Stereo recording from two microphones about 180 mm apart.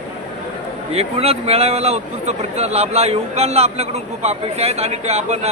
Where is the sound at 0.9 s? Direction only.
35° right (ahead or behind).